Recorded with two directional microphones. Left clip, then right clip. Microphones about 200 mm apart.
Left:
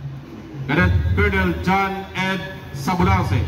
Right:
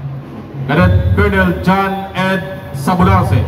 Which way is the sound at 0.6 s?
55° right (ahead or behind).